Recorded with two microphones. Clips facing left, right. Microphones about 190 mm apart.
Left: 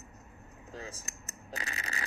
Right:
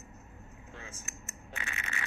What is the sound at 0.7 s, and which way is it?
Coin, 35° left (ahead or behind).